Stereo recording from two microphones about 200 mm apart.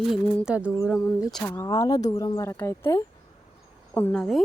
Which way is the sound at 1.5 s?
15° left (ahead or behind).